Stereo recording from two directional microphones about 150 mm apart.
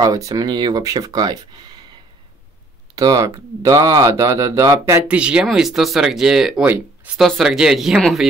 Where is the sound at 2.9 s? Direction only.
25° right (ahead or behind).